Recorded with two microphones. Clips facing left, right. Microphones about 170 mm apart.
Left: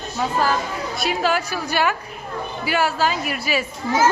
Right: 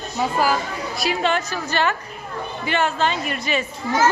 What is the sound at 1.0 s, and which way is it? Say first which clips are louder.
A child's voice: even; centre (ahead or behind).